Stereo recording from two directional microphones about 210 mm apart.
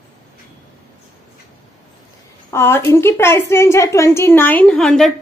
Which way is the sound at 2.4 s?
10° left (ahead or behind).